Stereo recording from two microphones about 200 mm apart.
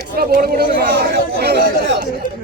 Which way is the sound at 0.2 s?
50° right (ahead or behind).